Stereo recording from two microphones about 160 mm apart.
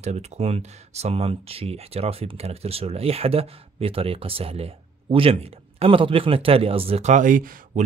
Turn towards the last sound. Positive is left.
turn(degrees=-55)  # may be behind; listen again after turning